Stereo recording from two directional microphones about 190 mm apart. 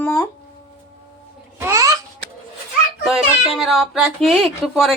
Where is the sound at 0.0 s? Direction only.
15° left (ahead or behind).